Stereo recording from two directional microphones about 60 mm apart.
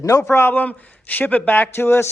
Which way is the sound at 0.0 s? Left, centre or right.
Left.